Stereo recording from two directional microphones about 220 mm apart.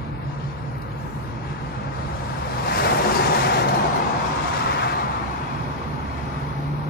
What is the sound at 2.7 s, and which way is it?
Vehicle, 45° left (ahead or behind).